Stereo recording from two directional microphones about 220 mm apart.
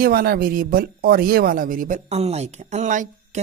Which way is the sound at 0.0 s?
40° right (ahead or behind).